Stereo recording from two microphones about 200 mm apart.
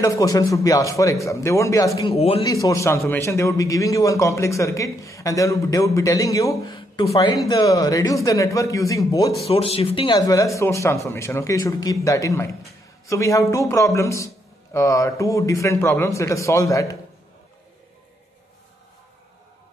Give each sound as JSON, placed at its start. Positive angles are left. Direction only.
{"t": 0.0, "sound": "a man's voice", "side_deg": 15}
{"t": 2.0, "sound": "speech", "side_deg": 25}
{"t": 2.4, "sound": "a man's voice", "side_deg": 15}
{"t": 9.5, "sound": "a man's voice", "side_deg": 30}